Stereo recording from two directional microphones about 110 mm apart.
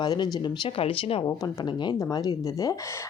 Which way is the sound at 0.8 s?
60° left (ahead or behind).